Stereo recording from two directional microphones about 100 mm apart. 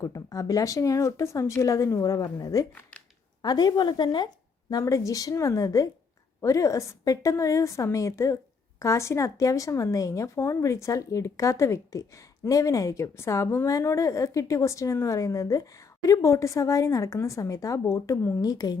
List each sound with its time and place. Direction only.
0.0 s a woman's voice: 35° left (ahead or behind)
4.7 s a woman's voice: 30° left (ahead or behind)
18.4 s speech: 40° left (ahead or behind)